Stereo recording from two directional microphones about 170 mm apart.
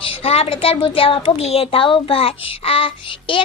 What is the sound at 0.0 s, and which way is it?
A woman's voice, 35° left (ahead or behind).